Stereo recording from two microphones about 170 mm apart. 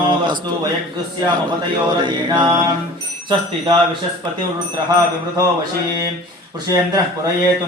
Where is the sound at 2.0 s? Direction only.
25° right (ahead or behind).